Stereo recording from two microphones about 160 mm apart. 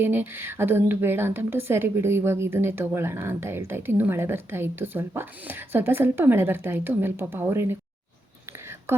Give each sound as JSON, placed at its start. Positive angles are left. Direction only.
{"t": 0.0, "sound": "a woman's voice", "side_deg": -15}